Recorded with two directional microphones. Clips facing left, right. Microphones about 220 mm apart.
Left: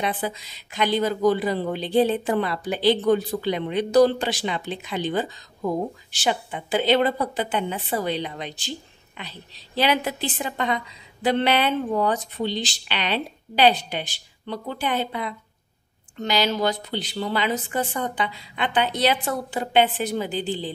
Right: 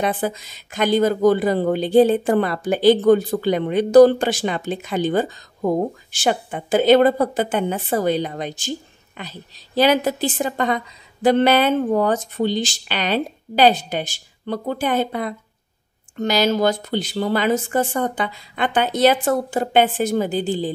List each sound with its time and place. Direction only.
0.0 s speech: 45° right (ahead or behind)